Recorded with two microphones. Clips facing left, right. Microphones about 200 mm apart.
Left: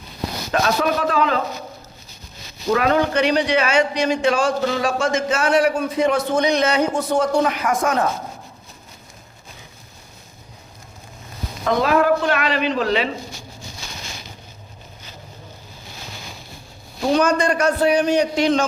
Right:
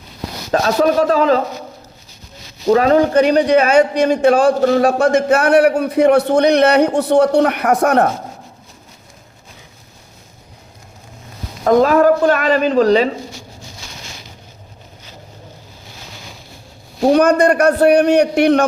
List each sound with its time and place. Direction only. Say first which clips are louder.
0.5 s a man's voice: right 6 dB; 35° right (ahead or behind)
2.6 s a man's voice: right 6 dB; 35° right (ahead or behind); by 8.1 s 65° right (ahead or behind)
11.6 s speech: right 7 dB; 45° right (ahead or behind)
17.0 s a man's voice: right 6 dB; 55° right (ahead or behind)